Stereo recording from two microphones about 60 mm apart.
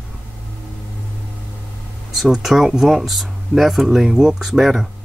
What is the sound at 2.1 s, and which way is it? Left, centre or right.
Speech, centre.